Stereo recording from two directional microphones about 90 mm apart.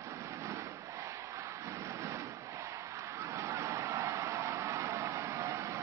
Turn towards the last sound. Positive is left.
turn(degrees=-35)  # may be behind; listen again after turning